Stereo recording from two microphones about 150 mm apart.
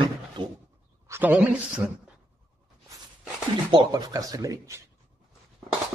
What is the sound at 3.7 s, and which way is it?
Speech, 25° right (ahead or behind).